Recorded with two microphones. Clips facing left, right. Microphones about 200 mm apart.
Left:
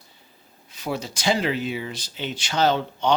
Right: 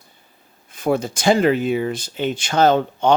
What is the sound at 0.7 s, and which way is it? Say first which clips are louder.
Speech: right 9 dB; 50° right (ahead or behind).